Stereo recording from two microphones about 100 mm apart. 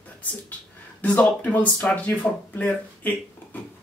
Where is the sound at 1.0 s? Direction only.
15° left (ahead or behind).